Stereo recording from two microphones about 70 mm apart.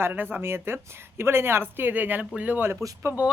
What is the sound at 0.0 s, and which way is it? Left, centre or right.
Speech, right.